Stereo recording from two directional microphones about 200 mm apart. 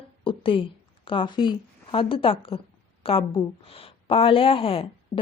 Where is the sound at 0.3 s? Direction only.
25° left (ahead or behind).